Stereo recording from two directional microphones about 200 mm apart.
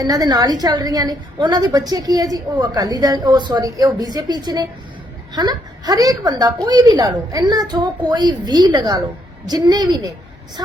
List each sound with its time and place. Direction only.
0.0 s a woman's voice: 20° right (ahead or behind)